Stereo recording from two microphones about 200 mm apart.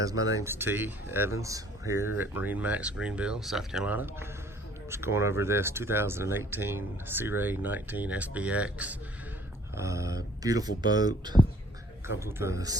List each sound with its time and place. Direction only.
0.0 s speech: 15° right (ahead or behind)